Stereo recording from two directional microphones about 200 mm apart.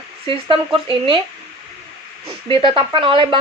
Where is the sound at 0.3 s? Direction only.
25° right (ahead or behind).